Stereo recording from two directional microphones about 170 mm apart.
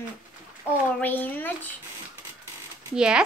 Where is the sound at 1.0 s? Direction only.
10° left (ahead or behind).